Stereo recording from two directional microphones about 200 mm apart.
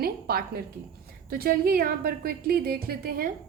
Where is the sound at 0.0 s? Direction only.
50° right (ahead or behind).